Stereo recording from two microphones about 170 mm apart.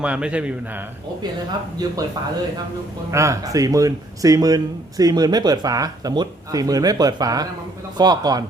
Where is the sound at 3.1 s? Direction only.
15° right (ahead or behind).